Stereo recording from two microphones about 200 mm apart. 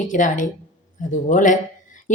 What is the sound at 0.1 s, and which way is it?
A woman's voice, 40° left (ahead or behind).